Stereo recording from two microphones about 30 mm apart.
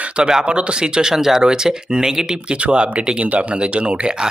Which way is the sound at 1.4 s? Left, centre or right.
Right.